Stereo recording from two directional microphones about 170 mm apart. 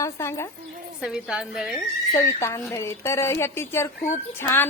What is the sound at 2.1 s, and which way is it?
Speech, 15° left (ahead or behind).